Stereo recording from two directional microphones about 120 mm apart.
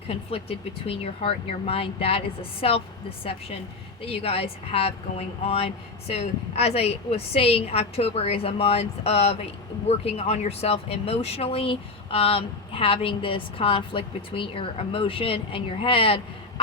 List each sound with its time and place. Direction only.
0.1 s speech: 55° left (ahead or behind)
4.0 s speech: 55° left (ahead or behind)